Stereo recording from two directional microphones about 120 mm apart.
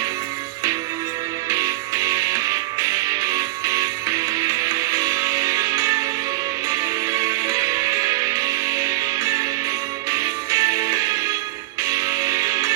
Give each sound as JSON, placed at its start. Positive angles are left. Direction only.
{"t": 1.5, "sound": "music", "side_deg": -30}